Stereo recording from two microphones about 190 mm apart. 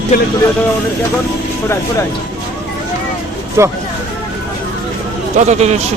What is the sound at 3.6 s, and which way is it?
Speech, 15° right (ahead or behind).